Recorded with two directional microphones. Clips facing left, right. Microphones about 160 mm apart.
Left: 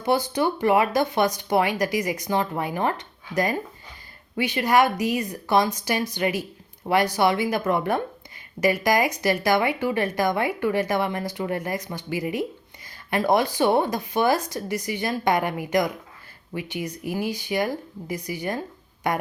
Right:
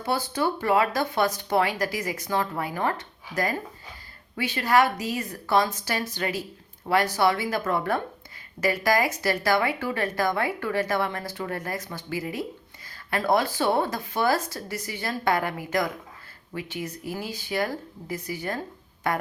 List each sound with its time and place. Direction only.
0.0 s a woman's voice: 15° left (ahead or behind)